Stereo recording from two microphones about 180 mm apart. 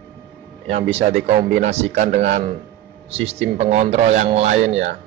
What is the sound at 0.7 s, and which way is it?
Speech, 35° right (ahead or behind).